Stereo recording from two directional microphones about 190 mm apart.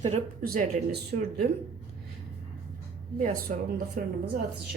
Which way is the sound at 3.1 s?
45° right (ahead or behind).